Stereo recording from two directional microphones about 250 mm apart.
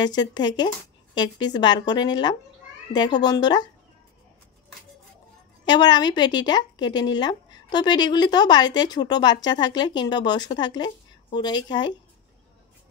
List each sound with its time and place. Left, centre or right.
0.0 s a woman's voice: centre
5.7 s a woman's voice: centre